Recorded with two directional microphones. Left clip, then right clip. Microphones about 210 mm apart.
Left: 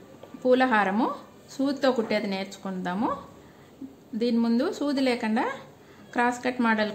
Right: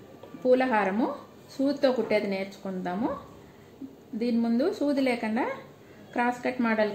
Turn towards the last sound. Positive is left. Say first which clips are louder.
# left 1 dB
turn(degrees=25)  # may be behind; listen again after turning